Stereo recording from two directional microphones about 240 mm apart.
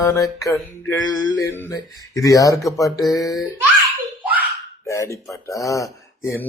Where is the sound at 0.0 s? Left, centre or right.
Centre.